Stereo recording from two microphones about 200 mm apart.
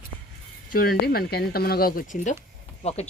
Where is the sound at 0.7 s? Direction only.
50° left (ahead or behind).